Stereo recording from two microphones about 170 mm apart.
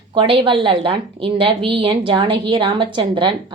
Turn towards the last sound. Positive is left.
turn(degrees=-30)  # may be behind; listen again after turning